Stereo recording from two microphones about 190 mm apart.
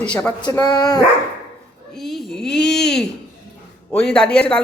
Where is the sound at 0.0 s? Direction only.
5° left (ahead or behind).